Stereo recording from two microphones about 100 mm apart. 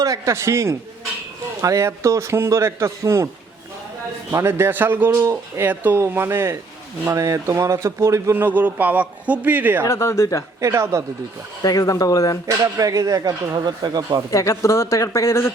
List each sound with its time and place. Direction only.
0.0 s speech: 35° right (ahead or behind)
4.3 s speech: 25° right (ahead or behind)
9.8 s speech: 30° left (ahead or behind)
10.6 s speech: 30° right (ahead or behind)
11.6 s speech: 35° left (ahead or behind)
12.5 s speech: 35° right (ahead or behind)
14.3 s speech: 35° left (ahead or behind)